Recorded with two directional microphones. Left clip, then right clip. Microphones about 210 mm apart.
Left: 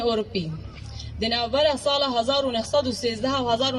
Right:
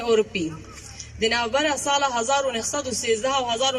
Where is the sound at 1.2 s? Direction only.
25° left (ahead or behind).